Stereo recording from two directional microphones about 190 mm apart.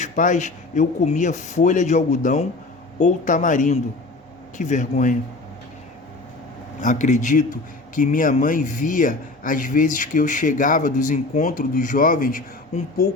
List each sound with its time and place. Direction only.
0.0 s speech: 40° left (ahead or behind)
6.8 s a man's voice: 40° left (ahead or behind)